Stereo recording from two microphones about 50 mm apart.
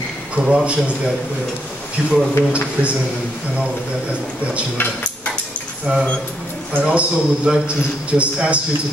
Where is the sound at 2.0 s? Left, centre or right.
Right.